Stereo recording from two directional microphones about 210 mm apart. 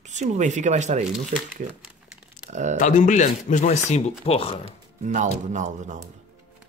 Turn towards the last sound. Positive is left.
turn(degrees=-35)  # may be behind; listen again after turning